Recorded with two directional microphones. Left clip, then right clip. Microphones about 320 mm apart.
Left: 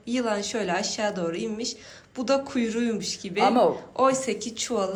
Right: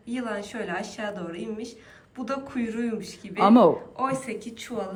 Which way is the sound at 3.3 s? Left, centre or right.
Right.